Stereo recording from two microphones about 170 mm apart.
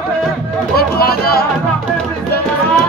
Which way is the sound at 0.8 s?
65° left (ahead or behind).